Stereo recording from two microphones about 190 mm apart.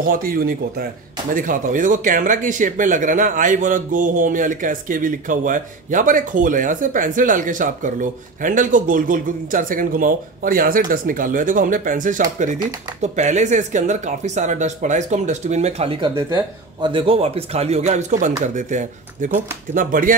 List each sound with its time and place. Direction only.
0.1 s speech: 50° right (ahead or behind)